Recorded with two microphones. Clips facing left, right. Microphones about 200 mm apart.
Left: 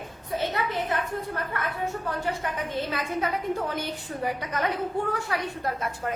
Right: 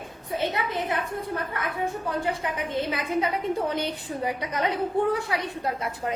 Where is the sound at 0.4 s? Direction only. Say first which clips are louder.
Right 1 dB; 15° right (ahead or behind).